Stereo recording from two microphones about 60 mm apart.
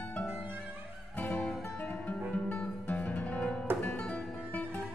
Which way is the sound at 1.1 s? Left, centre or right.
Left.